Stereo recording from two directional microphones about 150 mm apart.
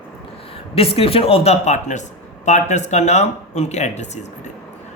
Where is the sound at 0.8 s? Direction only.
40° left (ahead or behind).